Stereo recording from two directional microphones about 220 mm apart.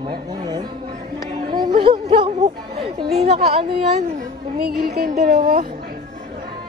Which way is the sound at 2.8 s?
25° right (ahead or behind).